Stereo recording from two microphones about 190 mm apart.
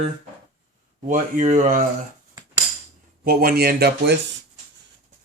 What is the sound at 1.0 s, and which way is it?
Speech, 40° right (ahead or behind).